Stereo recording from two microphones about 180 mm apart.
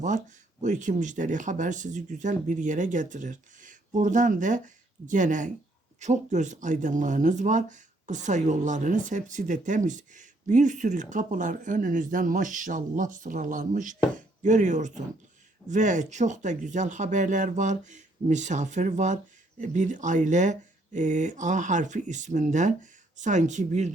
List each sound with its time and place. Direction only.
0.6 s speech: 45° right (ahead or behind)